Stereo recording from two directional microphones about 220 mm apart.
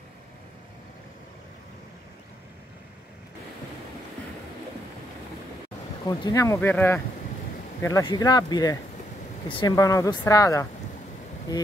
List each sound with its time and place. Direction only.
6.0 s speech: 15° left (ahead or behind)